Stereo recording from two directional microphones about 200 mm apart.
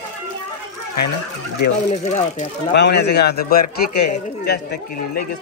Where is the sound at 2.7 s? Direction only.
60° left (ahead or behind).